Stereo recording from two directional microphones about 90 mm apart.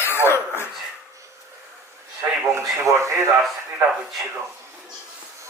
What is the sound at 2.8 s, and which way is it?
Speech, 35° right (ahead or behind).